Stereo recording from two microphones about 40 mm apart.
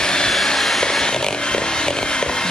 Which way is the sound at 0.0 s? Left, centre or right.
Centre.